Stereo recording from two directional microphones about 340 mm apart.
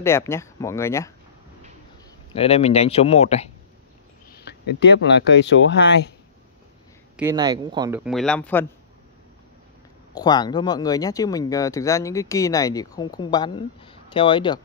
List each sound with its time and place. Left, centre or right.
0.0 s speech: centre
2.3 s speech: centre
4.3 s a sound: left
4.7 s speech: left
7.2 s speech: centre
10.1 s speech: centre